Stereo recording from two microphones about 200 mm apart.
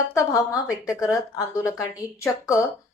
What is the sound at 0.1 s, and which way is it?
Speech, 15° left (ahead or behind).